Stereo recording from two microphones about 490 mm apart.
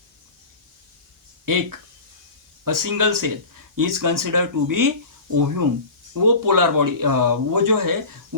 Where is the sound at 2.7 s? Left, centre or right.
Right.